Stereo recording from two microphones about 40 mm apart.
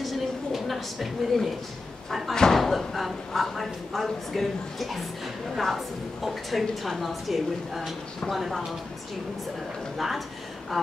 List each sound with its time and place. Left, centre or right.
0.0 s a sound: centre
2.0 s speech: centre
2.3 s slam: centre
2.6 s speech: centre
9.9 s speech: centre